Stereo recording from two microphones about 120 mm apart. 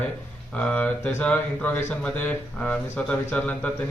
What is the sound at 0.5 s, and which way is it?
Speech, 10° left (ahead or behind).